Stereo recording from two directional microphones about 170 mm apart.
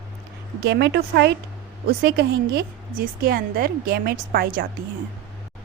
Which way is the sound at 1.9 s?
65° right (ahead or behind).